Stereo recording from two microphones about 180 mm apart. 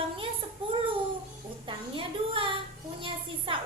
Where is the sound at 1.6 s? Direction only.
30° right (ahead or behind).